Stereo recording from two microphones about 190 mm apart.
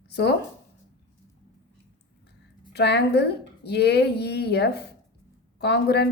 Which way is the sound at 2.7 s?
60° left (ahead or behind).